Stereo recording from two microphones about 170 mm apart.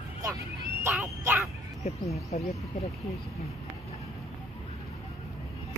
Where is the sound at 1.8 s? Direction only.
40° left (ahead or behind).